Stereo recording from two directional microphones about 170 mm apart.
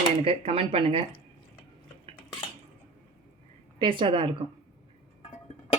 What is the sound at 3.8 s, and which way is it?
Speech, 30° right (ahead or behind).